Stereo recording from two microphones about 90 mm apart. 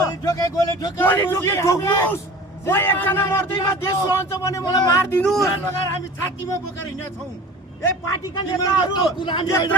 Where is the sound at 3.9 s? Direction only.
55° left (ahead or behind).